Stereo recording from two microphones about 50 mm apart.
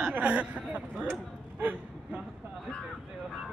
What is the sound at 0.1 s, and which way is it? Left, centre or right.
Speech, right.